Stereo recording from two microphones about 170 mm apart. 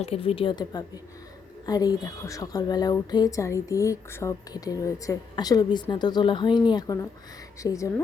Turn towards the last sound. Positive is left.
turn(degrees=20)  # may be behind; listen again after turning